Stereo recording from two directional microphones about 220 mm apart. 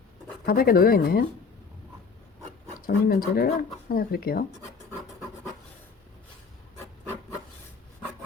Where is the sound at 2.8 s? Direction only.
40° left (ahead or behind).